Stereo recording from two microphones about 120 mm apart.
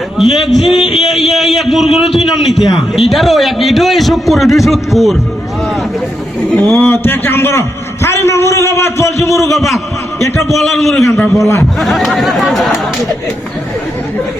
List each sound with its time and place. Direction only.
0.2 s a man's voice: centre (ahead or behind)
0.9 s a sound: centre (ahead or behind)
2.1 s a man's voice: centre (ahead or behind)
6.5 s a man's voice: 10° left (ahead or behind)
8.0 s a sound: 20° left (ahead or behind)
9.6 s a man's voice: centre (ahead or behind)
10.2 s a man's voice: 25° left (ahead or behind)
10.5 s a man's voice: centre (ahead or behind)
11.3 s a man's voice: 25° left (ahead or behind)
11.8 s a man's voice: centre (ahead or behind)